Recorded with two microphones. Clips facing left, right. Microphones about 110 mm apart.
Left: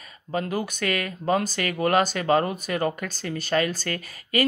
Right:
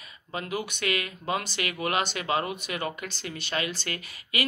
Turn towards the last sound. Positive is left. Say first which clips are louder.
# left 7 dB
turn(degrees=40)  # may be behind; listen again after turning